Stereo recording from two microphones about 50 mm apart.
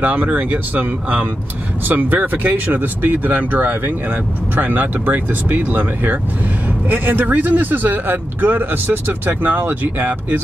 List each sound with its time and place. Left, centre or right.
0.0 s a man's voice: right